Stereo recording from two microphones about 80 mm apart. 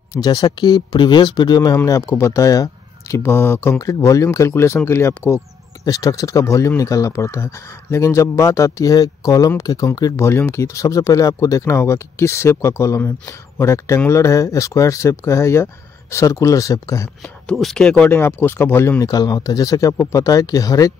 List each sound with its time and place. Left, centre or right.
0.1 s speech: left
1.9 s speech: left
3.2 s speech: left
3.7 s speech: left
5.9 s speech: left
10.1 s speech: left
17.2 s speech: centre
18.1 s speech: left
19.0 s speech: left